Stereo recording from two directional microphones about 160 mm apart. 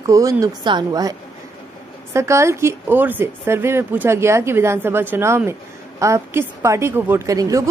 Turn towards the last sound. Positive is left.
turn(degrees=-20)  # may be behind; listen again after turning